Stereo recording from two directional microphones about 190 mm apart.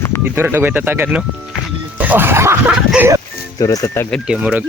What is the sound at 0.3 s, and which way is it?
Speech, 10° right (ahead or behind).